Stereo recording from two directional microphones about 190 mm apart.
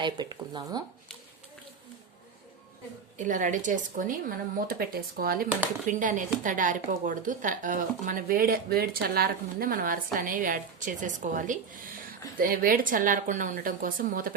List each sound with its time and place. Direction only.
0.0 s speech: 25° right (ahead or behind)
3.2 s speech: 45° right (ahead or behind)
5.9 s speech: 40° right (ahead or behind)